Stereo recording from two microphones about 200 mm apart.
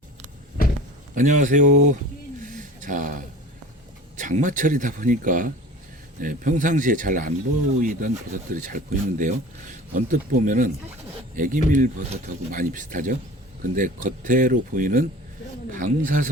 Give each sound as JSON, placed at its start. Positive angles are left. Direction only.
{"t": 1.1, "sound": "speech", "side_deg": -40}
{"t": 2.4, "sound": "a sound", "side_deg": -40}
{"t": 4.2, "sound": "speech", "side_deg": -40}